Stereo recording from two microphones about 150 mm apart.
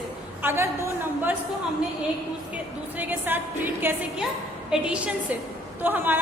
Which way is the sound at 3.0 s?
10° right (ahead or behind).